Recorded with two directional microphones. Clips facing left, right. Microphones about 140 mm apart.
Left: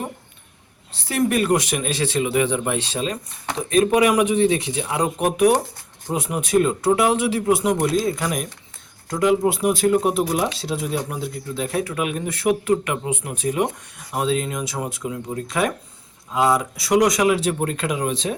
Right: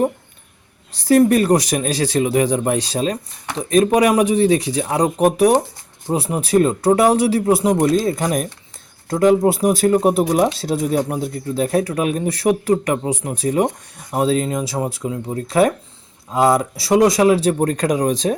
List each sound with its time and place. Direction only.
0.9 s speech: 40° right (ahead or behind)